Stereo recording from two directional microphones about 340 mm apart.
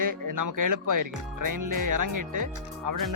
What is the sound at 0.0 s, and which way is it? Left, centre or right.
Speech, right.